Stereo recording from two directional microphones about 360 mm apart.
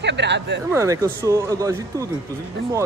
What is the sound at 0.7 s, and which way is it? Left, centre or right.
Speech, centre.